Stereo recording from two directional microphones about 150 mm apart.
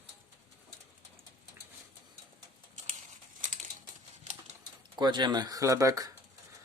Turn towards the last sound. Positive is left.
turn(degrees=-20)  # may be behind; listen again after turning